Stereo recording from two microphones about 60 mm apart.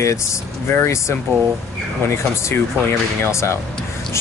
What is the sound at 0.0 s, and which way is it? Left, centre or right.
Speech, left.